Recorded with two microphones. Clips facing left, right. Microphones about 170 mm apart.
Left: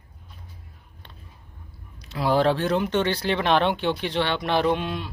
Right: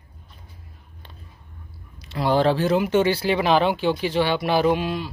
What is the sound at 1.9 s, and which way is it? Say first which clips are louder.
Speech: right 1 dB; centre (ahead or behind).